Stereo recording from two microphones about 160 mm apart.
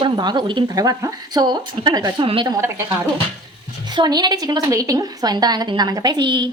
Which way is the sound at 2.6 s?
15° right (ahead or behind).